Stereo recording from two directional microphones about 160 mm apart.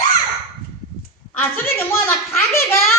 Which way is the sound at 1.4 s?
15° left (ahead or behind).